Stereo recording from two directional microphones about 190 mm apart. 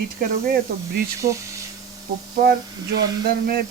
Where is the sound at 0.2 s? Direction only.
50° right (ahead or behind).